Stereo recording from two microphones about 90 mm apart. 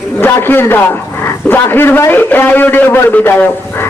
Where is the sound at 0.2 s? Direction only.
25° left (ahead or behind).